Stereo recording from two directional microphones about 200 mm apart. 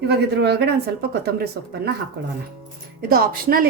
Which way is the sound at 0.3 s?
55° right (ahead or behind).